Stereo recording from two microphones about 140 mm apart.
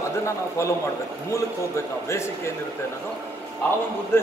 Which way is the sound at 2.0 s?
20° left (ahead or behind).